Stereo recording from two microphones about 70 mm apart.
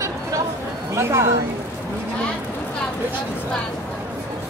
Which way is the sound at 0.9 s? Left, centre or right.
Right.